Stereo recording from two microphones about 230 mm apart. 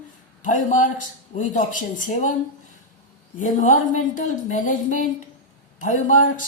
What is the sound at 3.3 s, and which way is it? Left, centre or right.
A woman's voice, left.